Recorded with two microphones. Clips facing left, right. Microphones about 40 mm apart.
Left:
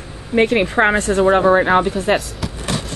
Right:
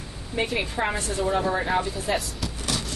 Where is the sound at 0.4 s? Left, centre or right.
Left.